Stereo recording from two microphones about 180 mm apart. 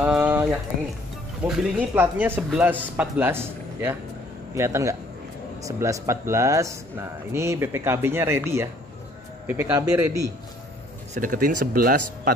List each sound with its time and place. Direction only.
0.0 s a sound: 5° right (ahead or behind)
1.4 s speech: 5° right (ahead or behind)
11.1 s speech: 50° right (ahead or behind)